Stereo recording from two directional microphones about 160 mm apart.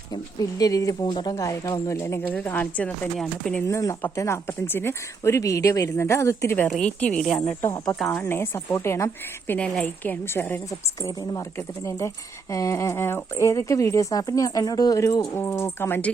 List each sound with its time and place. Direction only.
0.6 s speech: 20° left (ahead or behind)
3.7 s speech: 20° left (ahead or behind)
6.7 s speech: 5° left (ahead or behind)
7.6 s speech: 20° left (ahead or behind)
7.9 s speech: centre (ahead or behind)
8.2 s a woman's voice: 15° left (ahead or behind)